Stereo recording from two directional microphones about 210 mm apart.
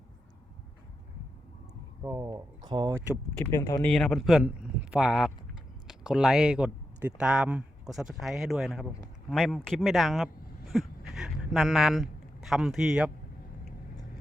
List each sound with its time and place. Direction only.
2.0 s speech: 15° right (ahead or behind)
3.3 s speech: 10° left (ahead or behind)
3.8 s speech: 5° left (ahead or behind)
10.7 s a sound: centre (ahead or behind)
12.5 s speech: centre (ahead or behind)